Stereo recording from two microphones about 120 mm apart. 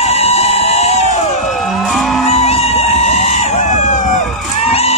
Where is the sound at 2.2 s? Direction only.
60° left (ahead or behind); by 4.3 s 90° left.